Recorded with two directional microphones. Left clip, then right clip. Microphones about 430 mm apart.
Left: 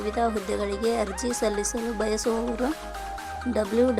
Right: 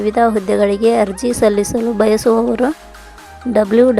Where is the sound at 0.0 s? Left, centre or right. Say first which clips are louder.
Right 12 dB; centre.